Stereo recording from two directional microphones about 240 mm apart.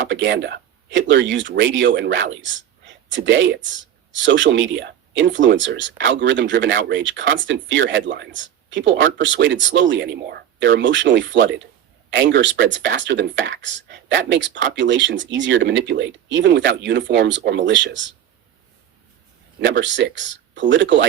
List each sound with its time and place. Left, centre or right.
0.1 s speech: right
19.5 s speech: right